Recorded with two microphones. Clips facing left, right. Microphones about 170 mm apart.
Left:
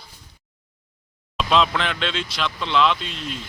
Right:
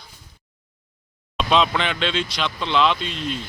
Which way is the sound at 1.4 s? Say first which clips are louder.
Right 1 dB; centre (ahead or behind).